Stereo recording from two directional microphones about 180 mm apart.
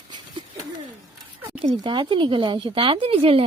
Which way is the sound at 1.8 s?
25° right (ahead or behind).